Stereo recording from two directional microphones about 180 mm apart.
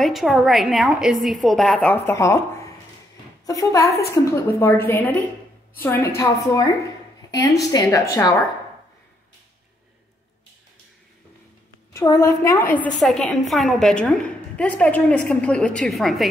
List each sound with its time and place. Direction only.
0.0 s a woman's voice: centre (ahead or behind); by 8.4 s 20° left (ahead or behind)
11.9 s a woman's voice: 20° left (ahead or behind)
13.0 s a woman's voice: centre (ahead or behind)